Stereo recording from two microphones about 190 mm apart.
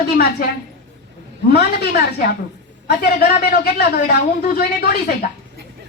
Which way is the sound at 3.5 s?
55° left (ahead or behind).